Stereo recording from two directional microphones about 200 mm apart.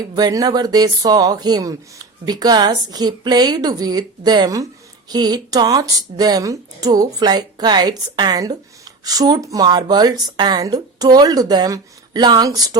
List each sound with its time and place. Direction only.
0.0 s speech: 20° right (ahead or behind)